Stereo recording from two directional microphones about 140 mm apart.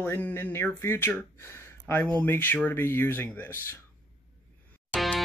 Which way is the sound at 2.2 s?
15° left (ahead or behind).